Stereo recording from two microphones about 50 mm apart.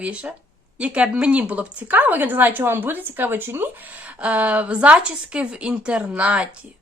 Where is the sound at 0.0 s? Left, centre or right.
Right.